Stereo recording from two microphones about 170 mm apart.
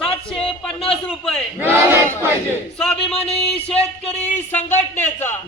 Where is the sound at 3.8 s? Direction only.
40° left (ahead or behind).